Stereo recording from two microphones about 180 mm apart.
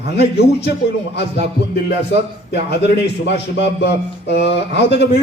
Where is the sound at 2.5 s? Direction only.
70° left (ahead or behind).